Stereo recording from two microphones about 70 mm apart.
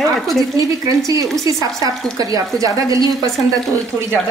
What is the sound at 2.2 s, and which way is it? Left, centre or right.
Speech, right.